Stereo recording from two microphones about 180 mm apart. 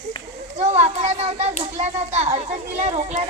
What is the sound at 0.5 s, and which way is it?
A child's voice, 40° right (ahead or behind).